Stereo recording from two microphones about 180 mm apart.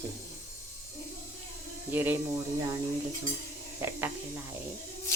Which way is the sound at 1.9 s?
10° right (ahead or behind).